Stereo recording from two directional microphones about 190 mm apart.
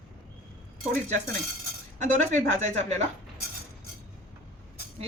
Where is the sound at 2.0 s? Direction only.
40° right (ahead or behind).